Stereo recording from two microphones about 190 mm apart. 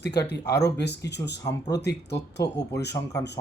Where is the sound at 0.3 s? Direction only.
60° left (ahead or behind).